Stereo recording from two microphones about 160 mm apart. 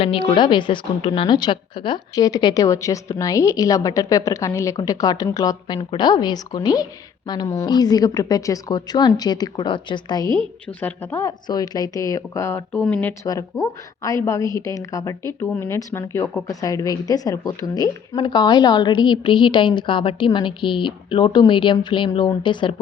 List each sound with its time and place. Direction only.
0.0 s a woman's voice: 35° left (ahead or behind)
10.8 s a woman's voice: 15° left (ahead or behind)
13.2 s a woman's voice: 20° left (ahead or behind)